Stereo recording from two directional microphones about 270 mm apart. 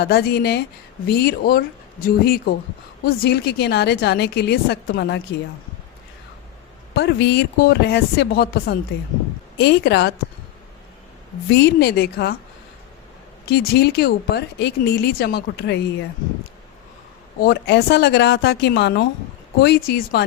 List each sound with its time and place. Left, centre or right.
0.0 s speech: left
6.9 s speech: left
11.5 s speech: left
13.5 s speech: left
17.4 s speech: left